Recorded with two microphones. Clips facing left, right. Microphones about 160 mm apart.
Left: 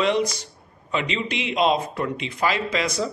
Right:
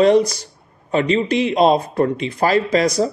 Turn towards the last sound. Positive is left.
turn(degrees=-40)  # may be behind; listen again after turning